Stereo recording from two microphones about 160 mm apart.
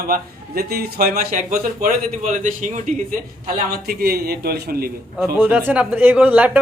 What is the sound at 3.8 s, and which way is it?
Speech, 70° right (ahead or behind).